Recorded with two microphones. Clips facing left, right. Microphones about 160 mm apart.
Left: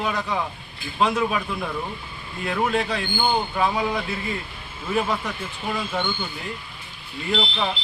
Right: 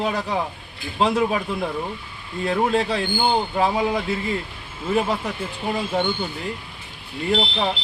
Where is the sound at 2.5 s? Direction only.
30° right (ahead or behind).